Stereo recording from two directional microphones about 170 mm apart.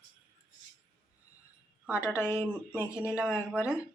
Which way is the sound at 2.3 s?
10° right (ahead or behind).